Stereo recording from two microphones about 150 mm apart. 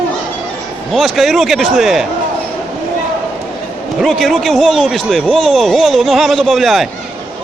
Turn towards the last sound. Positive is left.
turn(degrees=0)  # may be behind; listen again after turning